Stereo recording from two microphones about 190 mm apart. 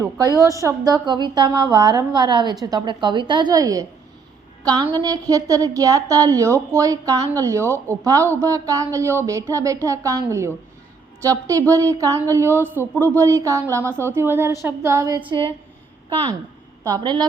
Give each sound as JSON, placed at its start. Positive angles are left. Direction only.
{"t": 0.0, "sound": "a woman's voice", "side_deg": -15}
{"t": 16.8, "sound": "a woman's voice", "side_deg": -20}